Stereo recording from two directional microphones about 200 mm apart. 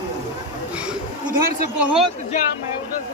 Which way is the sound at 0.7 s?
5° right (ahead or behind).